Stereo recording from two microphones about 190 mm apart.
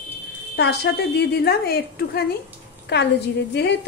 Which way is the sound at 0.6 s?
60° left (ahead or behind).